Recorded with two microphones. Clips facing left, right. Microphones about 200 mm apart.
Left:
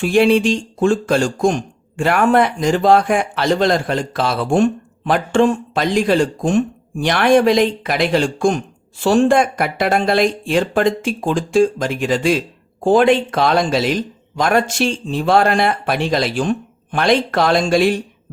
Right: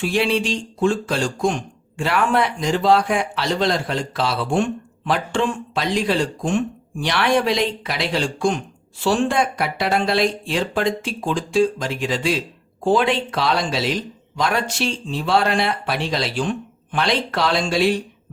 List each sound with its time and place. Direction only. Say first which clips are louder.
0.0 s speech: left 7 dB; 50° left (ahead or behind)